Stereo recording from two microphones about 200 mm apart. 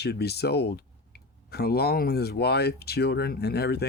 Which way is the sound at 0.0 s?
55° left (ahead or behind).